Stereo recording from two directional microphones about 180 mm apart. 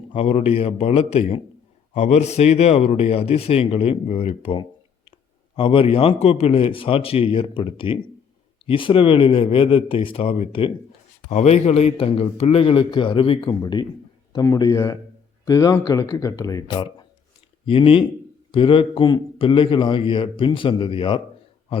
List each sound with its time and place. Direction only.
0.1 s a man's voice: 35° left (ahead or behind)